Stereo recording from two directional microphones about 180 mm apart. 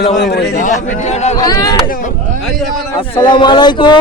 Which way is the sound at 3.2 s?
25° left (ahead or behind).